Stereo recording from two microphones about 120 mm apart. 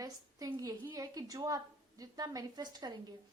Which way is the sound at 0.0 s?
30° right (ahead or behind).